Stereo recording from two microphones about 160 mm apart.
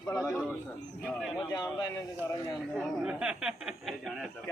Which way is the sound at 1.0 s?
Centre (ahead or behind).